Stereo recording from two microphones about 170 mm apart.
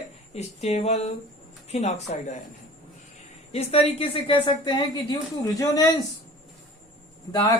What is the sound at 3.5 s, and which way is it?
A woman's voice, 35° left (ahead or behind).